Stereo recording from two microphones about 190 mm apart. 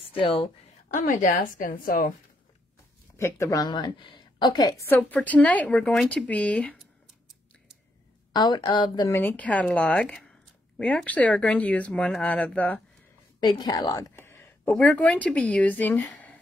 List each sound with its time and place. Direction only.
0.1 s a woman's voice: 30° left (ahead or behind)
0.8 s a woman's voice: 45° left (ahead or behind)
3.2 s a woman's voice: 15° left (ahead or behind)
8.3 s a woman's voice: 25° left (ahead or behind)
9.1 s a woman's voice: 10° left (ahead or behind)
13.4 s a woman's voice: 20° left (ahead or behind)